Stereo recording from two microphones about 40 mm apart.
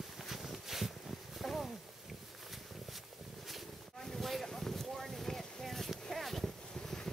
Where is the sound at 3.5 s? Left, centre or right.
Centre.